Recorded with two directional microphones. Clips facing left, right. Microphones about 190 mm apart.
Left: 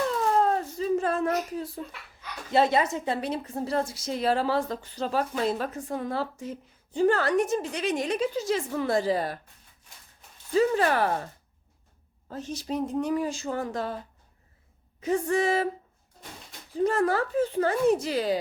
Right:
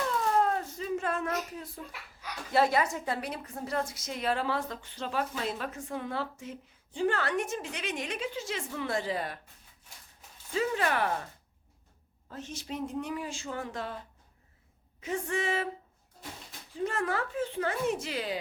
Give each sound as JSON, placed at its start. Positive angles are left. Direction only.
{"t": 0.3, "sound": "a sound", "side_deg": 30}
{"t": 2.5, "sound": "a woman's voice", "side_deg": 25}
{"t": 10.5, "sound": "a woman's voice", "side_deg": 40}
{"t": 12.3, "sound": "a woman's voice", "side_deg": 35}
{"t": 15.0, "sound": "a woman's voice", "side_deg": 40}
{"t": 16.7, "sound": "a woman's voice", "side_deg": 35}